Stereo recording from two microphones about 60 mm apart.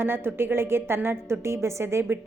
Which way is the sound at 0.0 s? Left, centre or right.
Right.